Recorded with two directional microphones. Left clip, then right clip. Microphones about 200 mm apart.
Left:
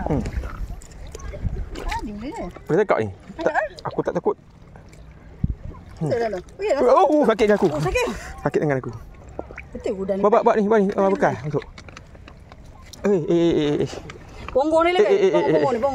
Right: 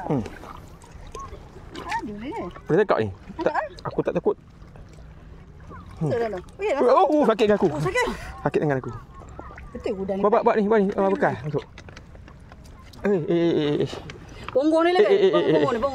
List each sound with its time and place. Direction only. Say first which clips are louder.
1.8 s a sound: even; 35° left (ahead or behind)
2.6 s speech: left 1 dB; 5° right (ahead or behind)
3.5 s a sound: left 4 dB; 40° left (ahead or behind)
4.0 s speech: left 1 dB; 5° right (ahead or behind)
6.0 s speech: left 2 dB; 25° left (ahead or behind)
6.8 s speech: left 2 dB; centre (ahead or behind)
9.8 s speech: left 3 dB; 10° left (ahead or behind)
11.6 s a sound: left 3 dB; 30° left (ahead or behind)
13.0 s speech: left 3 dB; 10° left (ahead or behind)
14.6 s speech: left 2 dB; 10° right (ahead or behind)
15.0 s speech: left 1 dB; centre (ahead or behind)